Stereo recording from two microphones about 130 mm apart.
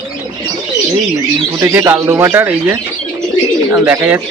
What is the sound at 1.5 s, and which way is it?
Speech, 20° right (ahead or behind).